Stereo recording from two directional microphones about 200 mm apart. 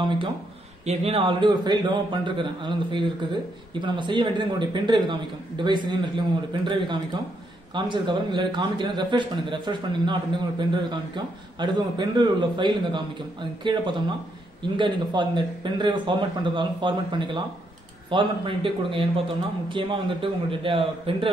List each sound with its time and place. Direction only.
0.0 s a man's voice: 25° right (ahead or behind)